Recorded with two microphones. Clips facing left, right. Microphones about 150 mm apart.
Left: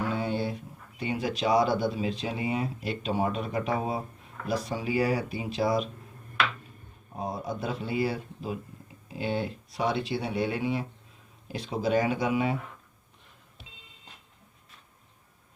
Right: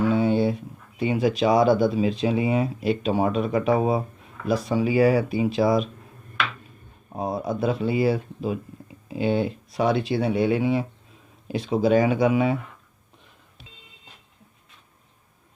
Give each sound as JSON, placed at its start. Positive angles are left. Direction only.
{"t": 0.2, "sound": "a sound", "side_deg": -90}
{"t": 0.9, "sound": "speech", "side_deg": -90}
{"t": 7.2, "sound": "speech", "side_deg": -80}